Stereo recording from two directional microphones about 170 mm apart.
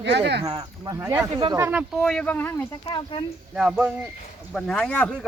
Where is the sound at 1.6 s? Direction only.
10° right (ahead or behind).